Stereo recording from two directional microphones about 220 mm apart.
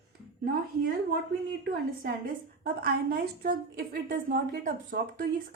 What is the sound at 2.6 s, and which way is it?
A woman's voice, 40° right (ahead or behind).